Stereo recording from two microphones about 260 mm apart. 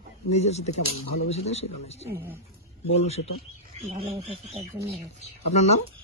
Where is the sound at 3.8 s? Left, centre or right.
Right.